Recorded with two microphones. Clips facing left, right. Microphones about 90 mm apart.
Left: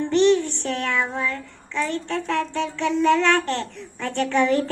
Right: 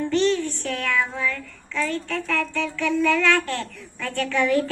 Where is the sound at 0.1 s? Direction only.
20° left (ahead or behind).